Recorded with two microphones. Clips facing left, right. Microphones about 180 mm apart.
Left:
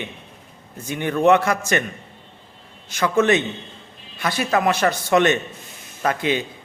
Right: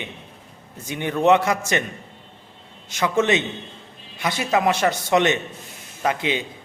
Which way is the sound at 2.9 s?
20° right (ahead or behind).